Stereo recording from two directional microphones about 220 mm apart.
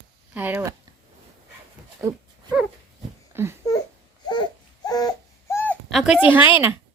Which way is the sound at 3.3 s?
10° right (ahead or behind).